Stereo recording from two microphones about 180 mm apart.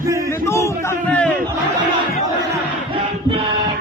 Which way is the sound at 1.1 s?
5° left (ahead or behind).